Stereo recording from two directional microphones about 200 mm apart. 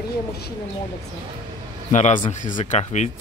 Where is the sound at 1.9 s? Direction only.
35° left (ahead or behind).